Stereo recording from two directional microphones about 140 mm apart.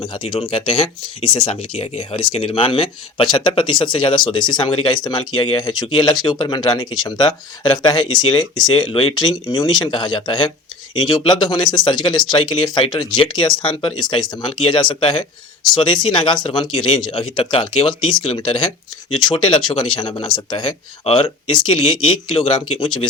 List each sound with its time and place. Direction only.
0.0 s speech: 35° left (ahead or behind)